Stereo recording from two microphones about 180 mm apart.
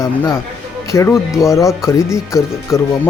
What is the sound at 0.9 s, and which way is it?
Speech, 15° left (ahead or behind).